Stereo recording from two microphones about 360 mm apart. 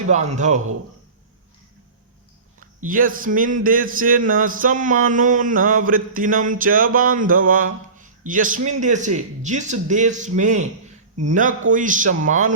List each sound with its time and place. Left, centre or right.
0.1 s a man's voice: centre
2.6 s a man's voice: right